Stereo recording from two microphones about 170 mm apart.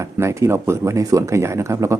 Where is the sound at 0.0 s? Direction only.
15° right (ahead or behind).